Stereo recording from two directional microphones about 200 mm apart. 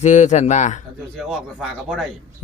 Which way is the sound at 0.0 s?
35° left (ahead or behind).